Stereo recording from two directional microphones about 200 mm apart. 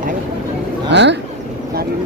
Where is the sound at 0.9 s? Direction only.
60° right (ahead or behind).